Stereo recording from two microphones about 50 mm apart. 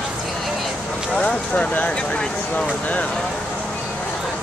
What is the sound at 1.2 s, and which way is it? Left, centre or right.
Speech, left.